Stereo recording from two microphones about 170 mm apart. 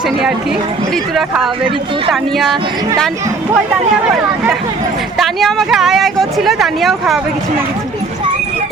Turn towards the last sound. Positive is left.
turn(degrees=0)  # may be behind; listen again after turning